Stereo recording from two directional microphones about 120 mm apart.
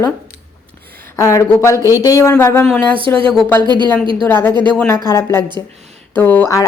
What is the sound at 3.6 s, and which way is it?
Speech, 40° right (ahead or behind).